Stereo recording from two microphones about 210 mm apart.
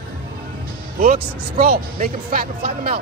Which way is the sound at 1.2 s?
50° right (ahead or behind).